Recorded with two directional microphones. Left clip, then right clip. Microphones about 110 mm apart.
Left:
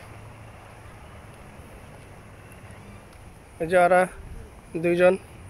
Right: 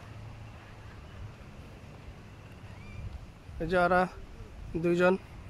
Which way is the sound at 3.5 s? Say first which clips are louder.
Left 7 dB; 25° right (ahead or behind).